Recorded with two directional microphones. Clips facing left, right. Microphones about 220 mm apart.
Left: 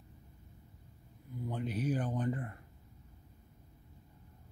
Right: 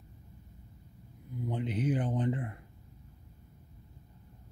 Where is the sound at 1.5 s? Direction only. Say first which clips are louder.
Right 3 dB; 20° right (ahead or behind).